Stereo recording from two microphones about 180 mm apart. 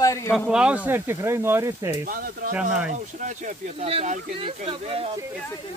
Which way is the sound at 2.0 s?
50° right (ahead or behind).